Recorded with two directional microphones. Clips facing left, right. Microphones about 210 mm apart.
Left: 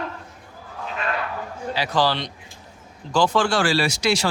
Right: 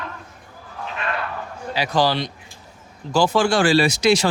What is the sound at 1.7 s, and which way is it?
A man's voice, 15° right (ahead or behind).